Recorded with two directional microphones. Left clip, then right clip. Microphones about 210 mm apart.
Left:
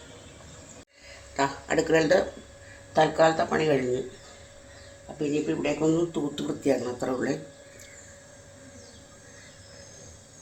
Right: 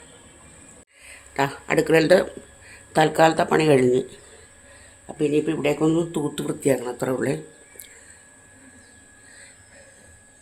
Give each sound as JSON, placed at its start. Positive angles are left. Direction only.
{"t": 1.3, "sound": "speech", "side_deg": -40}
{"t": 5.1, "sound": "speech", "side_deg": -55}